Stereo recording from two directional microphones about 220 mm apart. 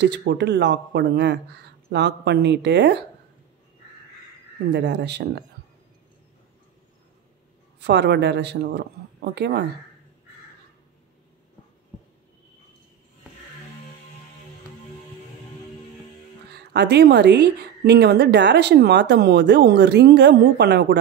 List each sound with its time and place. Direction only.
0.0 s a woman's voice: 50° right (ahead or behind)
4.7 s a woman's voice: 50° right (ahead or behind)
7.8 s a woman's voice: 50° right (ahead or behind)
16.5 s a woman's voice: 50° right (ahead or behind)